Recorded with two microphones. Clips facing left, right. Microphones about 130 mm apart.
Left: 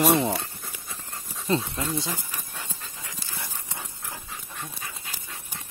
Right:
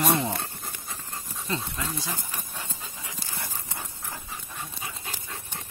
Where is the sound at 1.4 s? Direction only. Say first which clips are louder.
Left 6 dB; 30° left (ahead or behind).